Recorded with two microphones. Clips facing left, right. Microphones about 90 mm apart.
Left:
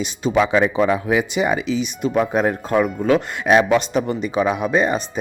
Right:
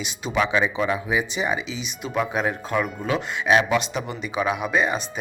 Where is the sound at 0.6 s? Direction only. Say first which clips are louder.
Left 6 dB; 55° left (ahead or behind).